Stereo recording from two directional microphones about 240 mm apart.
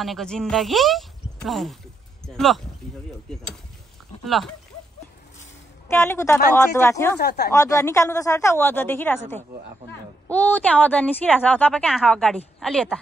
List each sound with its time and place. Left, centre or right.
0.0 s a woman's voice: centre
2.8 s a sound: centre
4.3 s a woman's voice: centre
5.9 s speech: centre
7.2 s speech: left
7.5 s a woman's voice: centre